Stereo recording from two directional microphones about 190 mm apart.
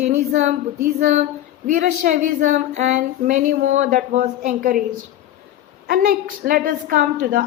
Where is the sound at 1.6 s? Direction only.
45° right (ahead or behind).